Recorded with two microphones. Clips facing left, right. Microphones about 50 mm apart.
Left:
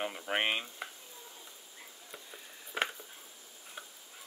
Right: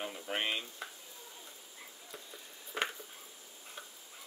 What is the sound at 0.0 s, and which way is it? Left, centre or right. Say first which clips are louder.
Stir: left 4 dB; left.